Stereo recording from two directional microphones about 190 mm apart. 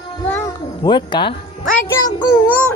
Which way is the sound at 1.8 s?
20° left (ahead or behind).